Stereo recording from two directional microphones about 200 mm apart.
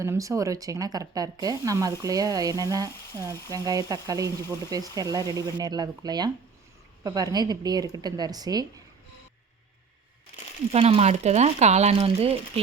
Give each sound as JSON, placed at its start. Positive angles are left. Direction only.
{"t": 0.0, "sound": "speech", "side_deg": -15}
{"t": 10.7, "sound": "speech", "side_deg": -30}